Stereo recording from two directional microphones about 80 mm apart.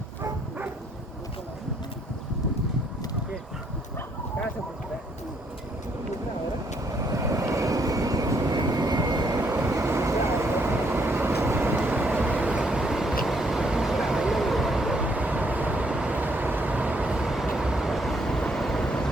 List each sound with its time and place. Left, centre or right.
6.8 s vehicle: right
8.5 s vehicle: right
9.5 s vehicle: right; by 15.0 s centre
15.0 s vehicle: centre